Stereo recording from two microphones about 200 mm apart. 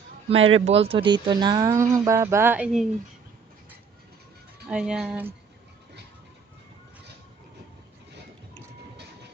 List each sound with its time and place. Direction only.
0.6 s speech: 30° right (ahead or behind); by 2.9 s 5° right (ahead or behind)
4.7 s speech: 5° right (ahead or behind)